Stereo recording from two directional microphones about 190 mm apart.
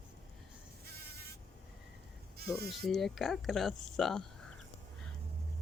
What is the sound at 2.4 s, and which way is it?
Insect, 55° right (ahead or behind).